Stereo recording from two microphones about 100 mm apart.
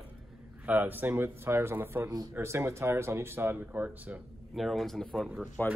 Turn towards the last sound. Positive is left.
turn(degrees=15)  # may be behind; listen again after turning